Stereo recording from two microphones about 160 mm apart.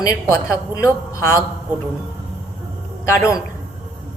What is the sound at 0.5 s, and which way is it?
Speech, 20° left (ahead or behind).